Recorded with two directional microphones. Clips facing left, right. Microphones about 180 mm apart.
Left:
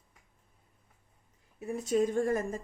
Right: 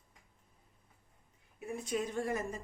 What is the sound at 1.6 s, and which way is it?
A woman's voice, 40° left (ahead or behind).